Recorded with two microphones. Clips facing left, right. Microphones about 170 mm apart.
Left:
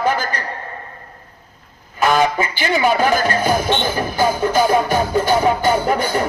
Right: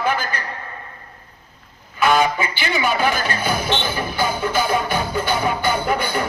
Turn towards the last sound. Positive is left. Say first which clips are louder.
# left 3 dB
turn(degrees=40)  # may be behind; listen again after turning